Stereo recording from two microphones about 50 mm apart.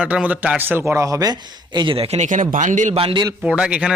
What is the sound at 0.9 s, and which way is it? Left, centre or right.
Speech, right.